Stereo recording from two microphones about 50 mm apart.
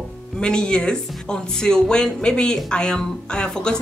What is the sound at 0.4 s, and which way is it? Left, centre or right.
Speech, centre.